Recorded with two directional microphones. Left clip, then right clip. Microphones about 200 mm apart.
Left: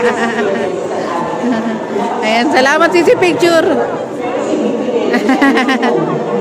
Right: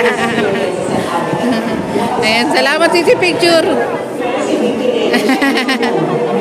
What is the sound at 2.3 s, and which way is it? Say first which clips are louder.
Speech: left 3 dB; 10° left (ahead or behind).